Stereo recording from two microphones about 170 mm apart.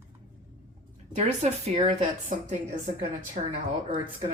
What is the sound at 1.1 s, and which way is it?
Speech, 40° right (ahead or behind).